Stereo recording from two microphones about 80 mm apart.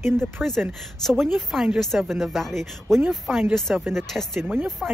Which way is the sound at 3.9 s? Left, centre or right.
Centre.